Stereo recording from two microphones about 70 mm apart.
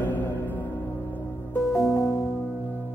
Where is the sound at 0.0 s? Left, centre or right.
Left.